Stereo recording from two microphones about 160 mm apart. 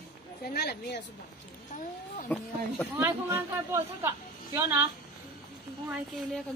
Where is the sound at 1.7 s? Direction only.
55° left (ahead or behind).